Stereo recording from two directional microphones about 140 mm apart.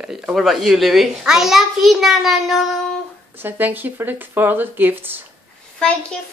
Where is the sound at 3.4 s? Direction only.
15° right (ahead or behind).